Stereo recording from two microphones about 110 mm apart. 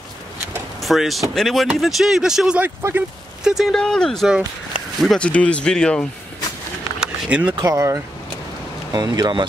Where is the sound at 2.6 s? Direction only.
20° right (ahead or behind).